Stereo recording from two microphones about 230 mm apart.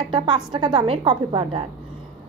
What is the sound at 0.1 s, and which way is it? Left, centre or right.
A woman's voice, right.